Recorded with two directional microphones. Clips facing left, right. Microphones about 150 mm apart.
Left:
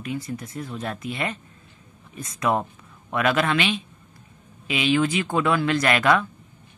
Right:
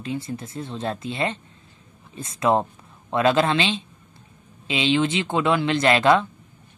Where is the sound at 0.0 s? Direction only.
25° right (ahead or behind).